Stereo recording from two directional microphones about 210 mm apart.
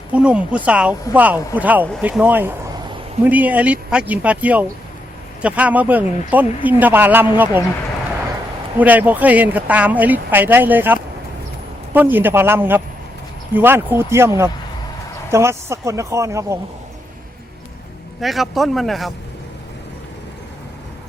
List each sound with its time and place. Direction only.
0.1 s a man's voice: 5° right (ahead or behind)
8.8 s speech: 10° right (ahead or behind)
18.2 s a man's voice: centre (ahead or behind)